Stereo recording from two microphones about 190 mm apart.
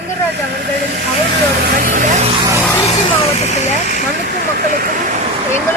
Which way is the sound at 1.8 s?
45° right (ahead or behind).